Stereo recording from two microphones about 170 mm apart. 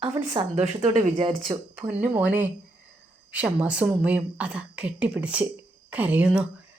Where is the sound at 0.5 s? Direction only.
40° right (ahead or behind).